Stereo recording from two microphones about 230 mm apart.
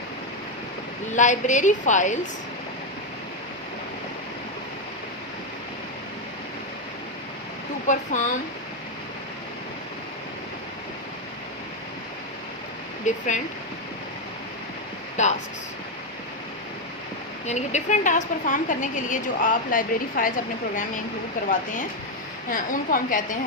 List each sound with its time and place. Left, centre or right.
1.1 s a woman's voice: left
7.9 s a woman's voice: left
13.1 s a woman's voice: left
15.1 s speech: left
17.4 s a woman's voice: left
22.4 s a woman's voice: left